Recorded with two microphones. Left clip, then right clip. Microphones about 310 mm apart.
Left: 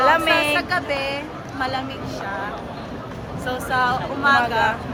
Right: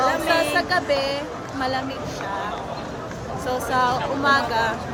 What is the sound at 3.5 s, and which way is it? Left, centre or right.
A woman's voice, centre.